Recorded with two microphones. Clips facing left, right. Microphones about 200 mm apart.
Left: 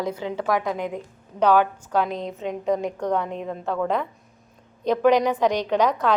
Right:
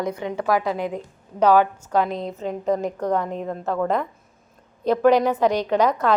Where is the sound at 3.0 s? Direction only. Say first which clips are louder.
Right 1 dB; 5° right (ahead or behind).